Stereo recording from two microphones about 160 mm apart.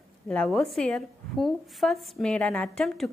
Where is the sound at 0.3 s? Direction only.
5° left (ahead or behind).